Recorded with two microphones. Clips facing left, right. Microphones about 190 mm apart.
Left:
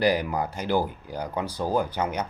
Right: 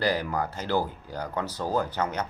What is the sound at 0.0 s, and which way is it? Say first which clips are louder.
Speech: left 3 dB; 15° left (ahead or behind).